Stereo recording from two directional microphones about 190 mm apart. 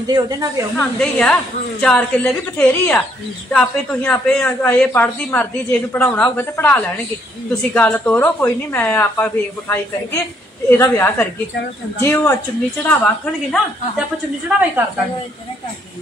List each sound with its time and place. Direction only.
0.0 s speech: 20° right (ahead or behind)
0.7 s a woman's voice: 5° left (ahead or behind)
10.8 s a woman's voice: 15° left (ahead or behind)